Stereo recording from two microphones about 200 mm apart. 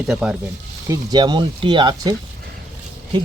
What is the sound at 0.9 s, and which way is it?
Speech, 20° right (ahead or behind).